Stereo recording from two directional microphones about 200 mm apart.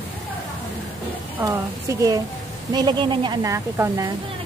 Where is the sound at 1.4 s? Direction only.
10° right (ahead or behind).